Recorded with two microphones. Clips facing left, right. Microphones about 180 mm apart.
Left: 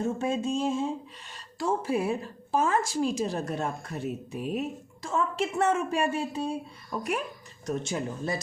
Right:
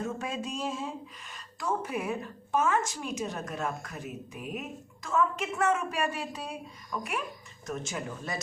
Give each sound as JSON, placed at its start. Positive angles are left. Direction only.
{"t": 0.0, "sound": "a woman's voice", "side_deg": 25}